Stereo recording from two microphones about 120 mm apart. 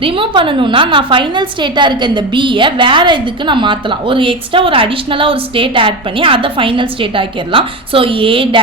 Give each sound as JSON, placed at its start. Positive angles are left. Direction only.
{"t": 0.0, "sound": "a woman's voice", "side_deg": -45}